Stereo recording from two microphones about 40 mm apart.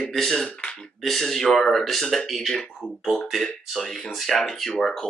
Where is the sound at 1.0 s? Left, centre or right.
Centre.